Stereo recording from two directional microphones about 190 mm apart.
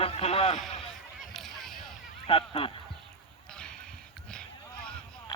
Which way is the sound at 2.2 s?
30° left (ahead or behind).